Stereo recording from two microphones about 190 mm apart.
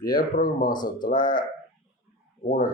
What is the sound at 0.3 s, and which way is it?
Speech, 45° left (ahead or behind).